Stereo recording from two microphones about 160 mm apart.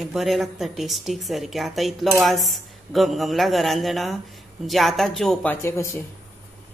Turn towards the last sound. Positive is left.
turn(degrees=15)  # may be behind; listen again after turning